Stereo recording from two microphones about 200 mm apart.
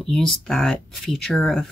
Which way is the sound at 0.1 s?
Centre (ahead or behind).